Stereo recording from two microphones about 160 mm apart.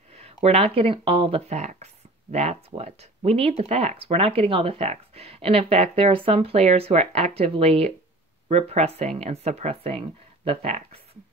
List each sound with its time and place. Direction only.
0.1 s speech: 40° right (ahead or behind)